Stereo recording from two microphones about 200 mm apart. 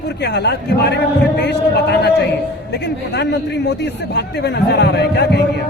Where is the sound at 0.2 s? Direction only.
55° left (ahead or behind).